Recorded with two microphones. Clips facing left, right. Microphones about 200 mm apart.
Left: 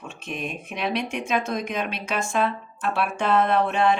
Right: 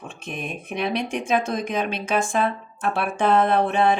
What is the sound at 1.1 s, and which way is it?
Speech, 30° right (ahead or behind).